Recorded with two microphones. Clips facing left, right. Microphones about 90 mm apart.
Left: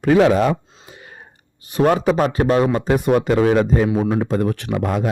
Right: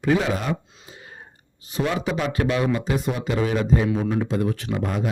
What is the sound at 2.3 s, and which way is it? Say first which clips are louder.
Speech: left 6 dB; 35° left (ahead or behind).